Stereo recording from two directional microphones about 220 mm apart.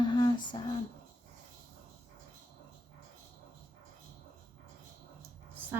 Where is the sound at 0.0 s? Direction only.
20° left (ahead or behind).